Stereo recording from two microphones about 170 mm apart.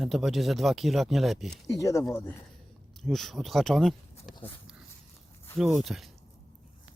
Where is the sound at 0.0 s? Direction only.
Centre (ahead or behind).